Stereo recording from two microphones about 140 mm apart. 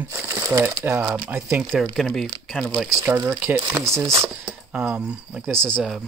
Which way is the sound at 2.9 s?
20° right (ahead or behind).